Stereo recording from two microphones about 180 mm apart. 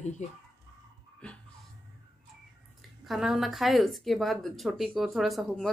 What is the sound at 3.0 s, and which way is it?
Speech, centre (ahead or behind).